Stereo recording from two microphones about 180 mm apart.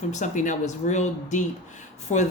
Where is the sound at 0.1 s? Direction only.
45° left (ahead or behind).